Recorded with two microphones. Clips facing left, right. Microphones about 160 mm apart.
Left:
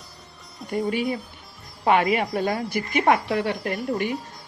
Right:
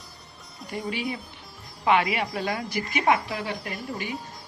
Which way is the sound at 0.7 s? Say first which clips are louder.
Left 6 dB; 45° left (ahead or behind).